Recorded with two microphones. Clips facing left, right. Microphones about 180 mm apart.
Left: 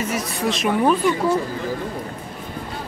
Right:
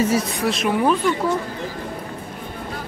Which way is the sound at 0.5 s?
Centre (ahead or behind).